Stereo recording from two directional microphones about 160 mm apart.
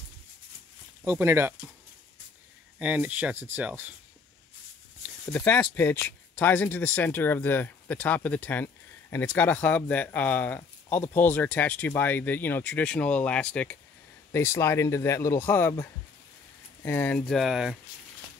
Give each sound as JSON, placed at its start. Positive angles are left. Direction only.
{"t": 1.0, "sound": "speech", "side_deg": -15}
{"t": 2.8, "sound": "speech", "side_deg": -10}
{"t": 5.3, "sound": "speech", "side_deg": 10}